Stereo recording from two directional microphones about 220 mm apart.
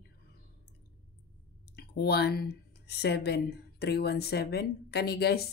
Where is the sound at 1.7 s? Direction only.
45° left (ahead or behind).